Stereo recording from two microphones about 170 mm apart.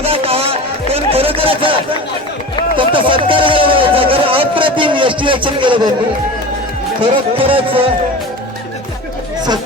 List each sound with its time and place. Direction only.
0.0 s music: 35° right (ahead or behind)
2.7 s a sound: 30° right (ahead or behind)
7.0 s speech: 30° right (ahead or behind)